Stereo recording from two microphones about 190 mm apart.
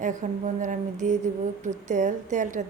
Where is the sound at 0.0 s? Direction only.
40° right (ahead or behind).